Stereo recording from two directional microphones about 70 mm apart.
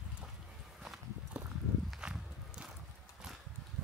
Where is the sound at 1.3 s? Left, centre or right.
Centre.